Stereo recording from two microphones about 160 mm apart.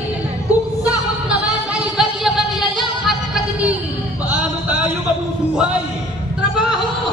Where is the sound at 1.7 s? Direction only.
5° right (ahead or behind).